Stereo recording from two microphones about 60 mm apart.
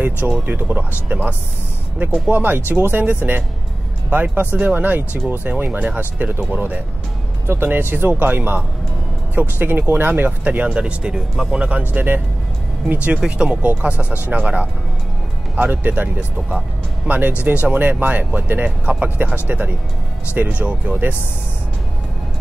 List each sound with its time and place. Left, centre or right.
0.5 s speech: right
11.8 s speech: right